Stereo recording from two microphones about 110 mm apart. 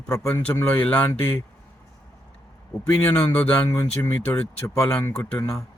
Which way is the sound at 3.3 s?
20° left (ahead or behind).